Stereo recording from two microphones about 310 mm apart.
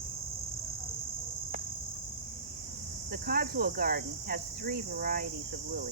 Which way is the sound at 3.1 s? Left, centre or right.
Right.